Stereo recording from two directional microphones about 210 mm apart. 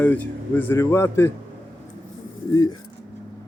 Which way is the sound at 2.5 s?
20° left (ahead or behind).